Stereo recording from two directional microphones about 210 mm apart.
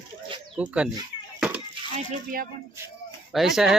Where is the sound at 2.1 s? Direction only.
40° right (ahead or behind).